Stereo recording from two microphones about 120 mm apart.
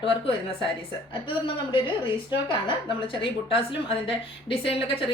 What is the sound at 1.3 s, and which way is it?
Speech, 45° left (ahead or behind).